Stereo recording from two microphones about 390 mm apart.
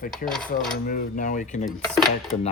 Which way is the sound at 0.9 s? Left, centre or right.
Left.